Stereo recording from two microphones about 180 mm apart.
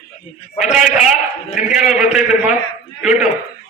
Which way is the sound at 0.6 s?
5° right (ahead or behind).